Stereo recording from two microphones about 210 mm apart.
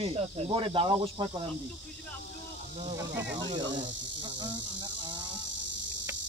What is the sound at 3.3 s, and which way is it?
Insect, 20° right (ahead or behind).